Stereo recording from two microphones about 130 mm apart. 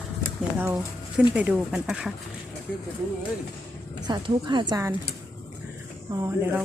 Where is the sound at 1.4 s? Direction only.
10° right (ahead or behind).